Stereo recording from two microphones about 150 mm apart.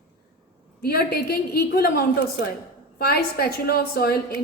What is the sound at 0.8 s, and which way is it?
A woman's voice, 90° left.